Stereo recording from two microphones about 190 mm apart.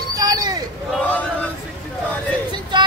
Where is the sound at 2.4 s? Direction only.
25° right (ahead or behind).